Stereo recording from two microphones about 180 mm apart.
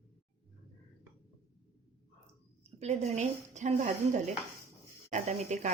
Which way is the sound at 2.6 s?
35° right (ahead or behind).